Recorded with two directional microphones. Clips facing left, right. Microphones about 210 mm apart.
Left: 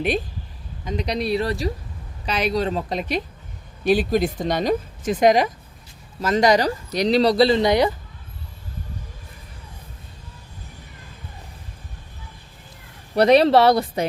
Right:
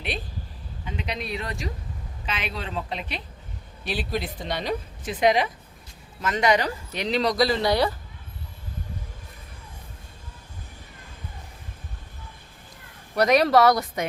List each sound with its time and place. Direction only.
0.9 s speech: 40° left (ahead or behind); by 7.9 s 20° left (ahead or behind)
13.1 s speech: 30° left (ahead or behind)